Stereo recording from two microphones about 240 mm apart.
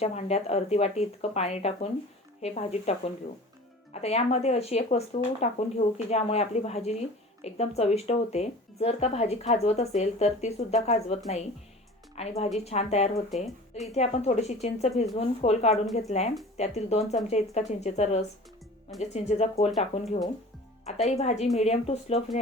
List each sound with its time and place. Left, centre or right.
0.0 s speech: left
3.9 s speech: left